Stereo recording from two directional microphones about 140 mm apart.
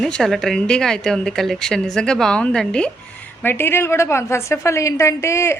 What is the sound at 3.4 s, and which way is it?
A woman's voice, 15° left (ahead or behind).